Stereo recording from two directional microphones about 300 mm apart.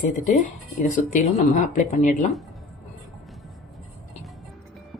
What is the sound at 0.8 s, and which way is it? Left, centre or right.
Speech, left.